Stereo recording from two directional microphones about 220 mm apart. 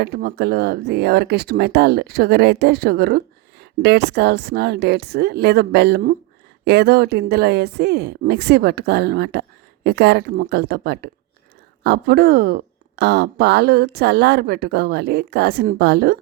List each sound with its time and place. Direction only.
0.0 s speech: 45° right (ahead or behind)